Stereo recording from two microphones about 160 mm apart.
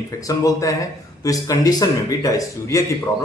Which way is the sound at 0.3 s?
20° left (ahead or behind).